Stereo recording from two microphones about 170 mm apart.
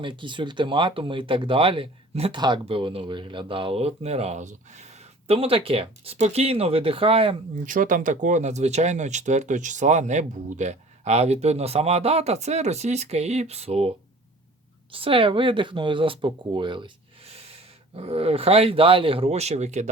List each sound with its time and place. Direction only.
0.0 s speech: 30° right (ahead or behind)
7.6 s speech: 50° right (ahead or behind)
14.9 s speech: 30° right (ahead or behind)